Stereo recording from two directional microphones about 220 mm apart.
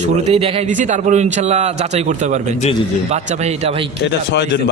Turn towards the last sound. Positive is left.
turn(degrees=50)  # may be behind; listen again after turning